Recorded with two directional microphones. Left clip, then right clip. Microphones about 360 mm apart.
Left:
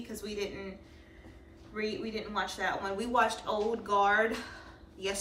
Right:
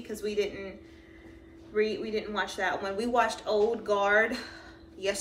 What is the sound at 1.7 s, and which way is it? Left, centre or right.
A woman's voice, centre.